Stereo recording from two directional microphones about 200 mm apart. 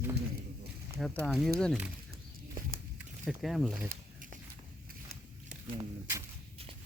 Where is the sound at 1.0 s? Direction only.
Centre (ahead or behind).